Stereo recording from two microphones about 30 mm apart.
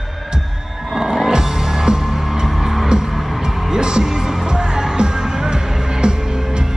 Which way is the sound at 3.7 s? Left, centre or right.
Right.